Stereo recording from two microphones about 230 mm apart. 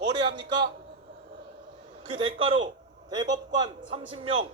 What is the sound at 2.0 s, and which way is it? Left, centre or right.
A man's voice, right.